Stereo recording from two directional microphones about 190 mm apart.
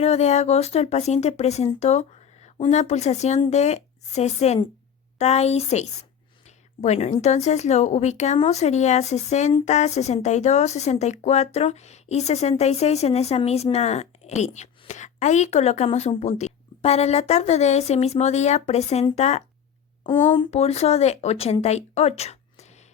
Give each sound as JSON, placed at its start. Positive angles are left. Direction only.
{"t": 0.0, "sound": "speech", "side_deg": 35}
{"t": 20.1, "sound": "speech", "side_deg": 25}